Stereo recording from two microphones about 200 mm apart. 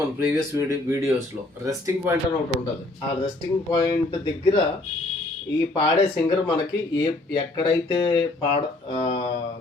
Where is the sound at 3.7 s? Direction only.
20° left (ahead or behind).